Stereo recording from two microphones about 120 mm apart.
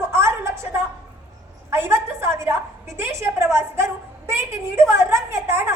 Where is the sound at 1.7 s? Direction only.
20° right (ahead or behind).